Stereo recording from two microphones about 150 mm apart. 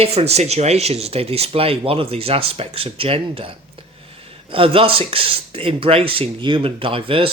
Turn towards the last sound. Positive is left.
turn(degrees=-35)  # may be behind; listen again after turning